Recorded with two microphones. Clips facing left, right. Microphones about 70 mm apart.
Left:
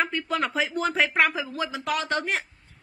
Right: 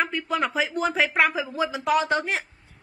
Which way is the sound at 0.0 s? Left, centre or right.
Centre.